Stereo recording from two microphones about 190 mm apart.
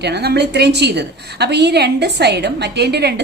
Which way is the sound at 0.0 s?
60° right (ahead or behind).